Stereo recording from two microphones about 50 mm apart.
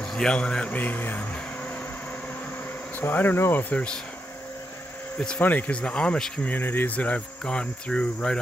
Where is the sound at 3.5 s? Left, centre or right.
Left.